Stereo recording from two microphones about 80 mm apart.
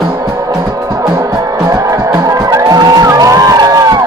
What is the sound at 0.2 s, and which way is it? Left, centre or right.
Music, right.